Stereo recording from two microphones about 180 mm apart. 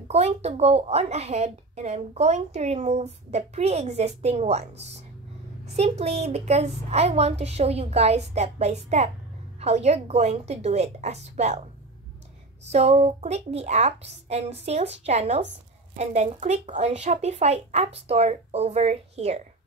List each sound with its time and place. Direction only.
0.1 s a woman's voice: 35° right (ahead or behind)
12.7 s a woman's voice: 35° right (ahead or behind)